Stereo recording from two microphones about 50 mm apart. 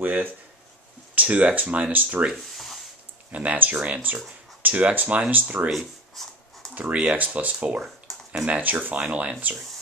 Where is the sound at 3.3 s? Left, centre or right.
Right.